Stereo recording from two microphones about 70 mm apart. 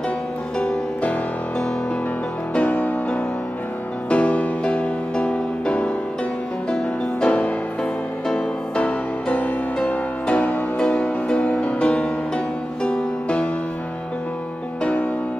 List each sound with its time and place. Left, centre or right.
0.6 s music: centre
2.5 s music: left
8.7 s music: left